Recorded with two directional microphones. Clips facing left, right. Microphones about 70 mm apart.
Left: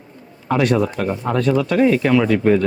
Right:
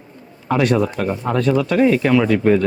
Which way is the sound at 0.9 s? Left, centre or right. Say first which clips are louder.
Even; right.